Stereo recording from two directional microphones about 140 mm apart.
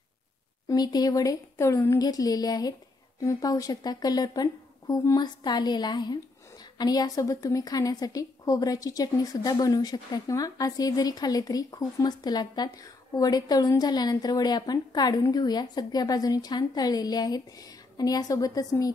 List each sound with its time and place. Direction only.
0.7 s a woman's voice: 30° left (ahead or behind)